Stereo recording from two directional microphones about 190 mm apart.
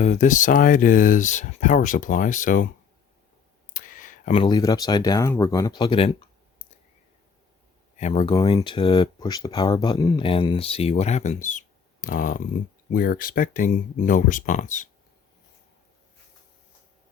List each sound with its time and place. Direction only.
0.0 s speech: 40° left (ahead or behind)
3.7 s a sound: 45° left (ahead or behind)
4.3 s speech: 25° left (ahead or behind)
7.9 s speech: 35° left (ahead or behind)